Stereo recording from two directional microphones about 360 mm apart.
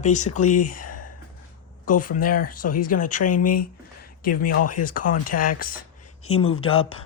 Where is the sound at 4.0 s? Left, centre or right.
Left.